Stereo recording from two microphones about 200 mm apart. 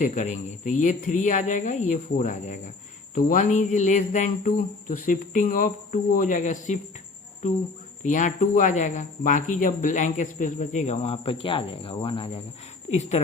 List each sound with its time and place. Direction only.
0.0 s speech: 40° left (ahead or behind)